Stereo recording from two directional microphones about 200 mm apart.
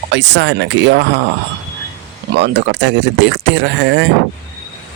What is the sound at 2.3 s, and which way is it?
Speech, 60° right (ahead or behind).